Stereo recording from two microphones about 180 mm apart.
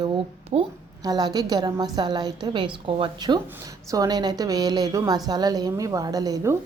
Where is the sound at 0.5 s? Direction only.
35° right (ahead or behind).